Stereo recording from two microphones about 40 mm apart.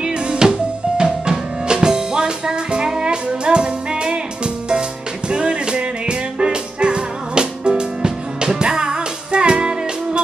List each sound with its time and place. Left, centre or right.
0.0 s music: right